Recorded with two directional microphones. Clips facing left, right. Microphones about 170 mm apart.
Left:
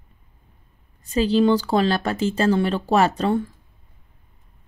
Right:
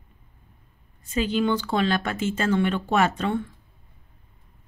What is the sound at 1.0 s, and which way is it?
Speech, 35° left (ahead or behind).